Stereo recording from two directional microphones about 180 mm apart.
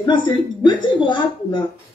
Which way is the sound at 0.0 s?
25° left (ahead or behind).